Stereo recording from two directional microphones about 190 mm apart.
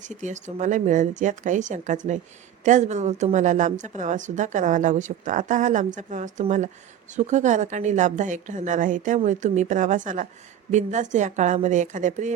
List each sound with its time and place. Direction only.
0.0 s a woman's voice: 40° right (ahead or behind)